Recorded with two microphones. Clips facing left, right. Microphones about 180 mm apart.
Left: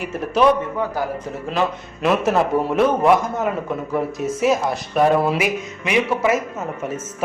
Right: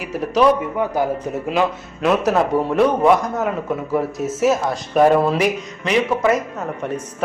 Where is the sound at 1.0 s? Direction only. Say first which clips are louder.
Right 7 dB; 20° right (ahead or behind).